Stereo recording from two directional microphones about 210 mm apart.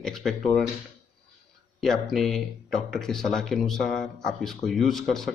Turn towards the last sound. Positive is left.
turn(degrees=0)  # may be behind; listen again after turning